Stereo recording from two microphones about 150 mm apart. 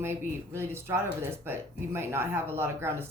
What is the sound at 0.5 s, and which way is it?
A woman's voice, 15° right (ahead or behind).